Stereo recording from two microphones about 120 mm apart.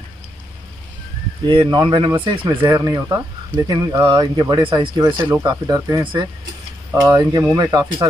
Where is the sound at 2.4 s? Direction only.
30° right (ahead or behind).